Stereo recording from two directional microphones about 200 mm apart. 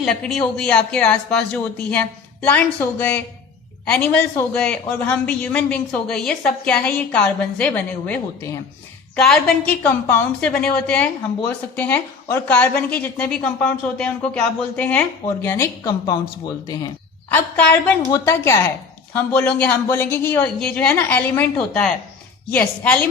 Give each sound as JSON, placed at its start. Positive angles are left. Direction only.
{"t": 0.0, "sound": "speech", "side_deg": 0}
{"t": 9.1, "sound": "speech", "side_deg": 5}